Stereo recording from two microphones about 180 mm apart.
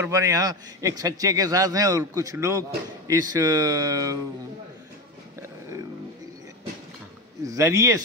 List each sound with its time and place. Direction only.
0.0 s a man's voice: 20° right (ahead or behind)
7.4 s a man's voice: 20° right (ahead or behind)